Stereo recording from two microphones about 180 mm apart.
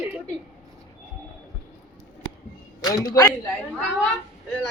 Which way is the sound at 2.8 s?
20° left (ahead or behind).